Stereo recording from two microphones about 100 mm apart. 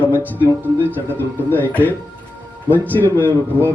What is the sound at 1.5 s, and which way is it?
A man's voice, 20° left (ahead or behind).